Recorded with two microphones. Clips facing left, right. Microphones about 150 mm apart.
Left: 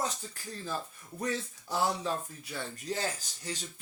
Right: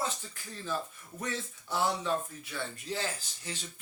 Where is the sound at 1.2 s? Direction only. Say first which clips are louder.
Left 3 dB; 40° left (ahead or behind).